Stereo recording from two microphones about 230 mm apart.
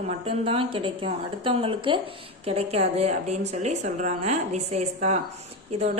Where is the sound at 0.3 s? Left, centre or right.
Right.